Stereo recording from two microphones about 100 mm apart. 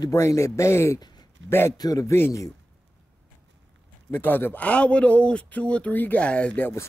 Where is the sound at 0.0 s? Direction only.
30° left (ahead or behind).